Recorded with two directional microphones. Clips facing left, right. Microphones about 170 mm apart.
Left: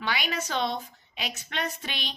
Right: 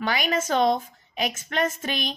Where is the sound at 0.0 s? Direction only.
45° right (ahead or behind).